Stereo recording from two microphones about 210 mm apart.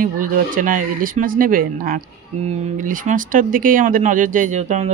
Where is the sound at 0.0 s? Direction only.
40° right (ahead or behind).